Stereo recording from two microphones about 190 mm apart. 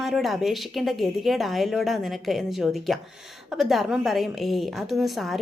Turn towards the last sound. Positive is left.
turn(degrees=0)  # may be behind; listen again after turning